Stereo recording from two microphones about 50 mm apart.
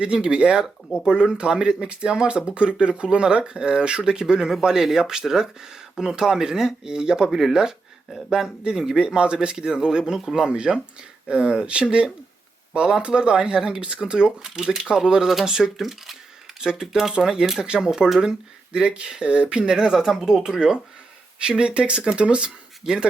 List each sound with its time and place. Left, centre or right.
0.0 s speech: right